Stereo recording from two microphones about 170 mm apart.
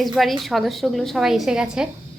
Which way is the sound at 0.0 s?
Centre (ahead or behind).